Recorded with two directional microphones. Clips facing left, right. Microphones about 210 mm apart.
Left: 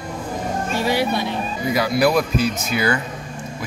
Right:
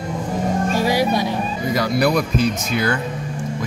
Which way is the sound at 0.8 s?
15° right (ahead or behind).